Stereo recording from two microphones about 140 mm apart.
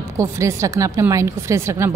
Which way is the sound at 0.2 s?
20° right (ahead or behind).